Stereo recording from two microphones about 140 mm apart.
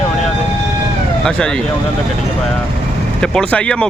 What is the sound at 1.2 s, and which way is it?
Speech, 5° left (ahead or behind).